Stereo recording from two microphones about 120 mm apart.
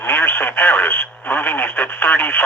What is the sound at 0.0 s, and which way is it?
Radio, 15° left (ahead or behind).